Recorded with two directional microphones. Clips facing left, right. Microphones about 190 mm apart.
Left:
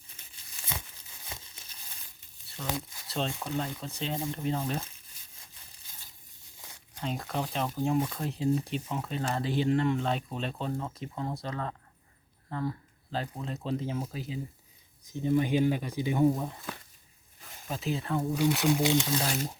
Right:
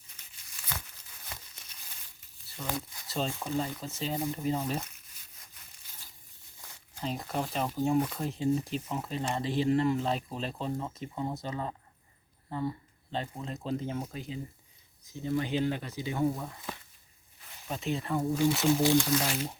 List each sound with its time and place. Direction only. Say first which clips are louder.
1.3 s crumpling: left 2 dB; 30° left (ahead or behind)
2.6 s speech: left 1 dB; centre (ahead or behind)
7.0 s speech: even; 5° right (ahead or behind)
15.1 s speech: left 4 dB; 15° left (ahead or behind)
17.7 s speech: even; centre (ahead or behind)
18.8 s speech: right 2 dB; 20° left (ahead or behind)